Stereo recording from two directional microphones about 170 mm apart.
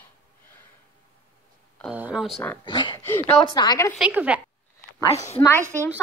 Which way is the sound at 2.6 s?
30° left (ahead or behind).